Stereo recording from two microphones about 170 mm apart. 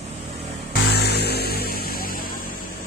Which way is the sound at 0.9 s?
75° left (ahead or behind).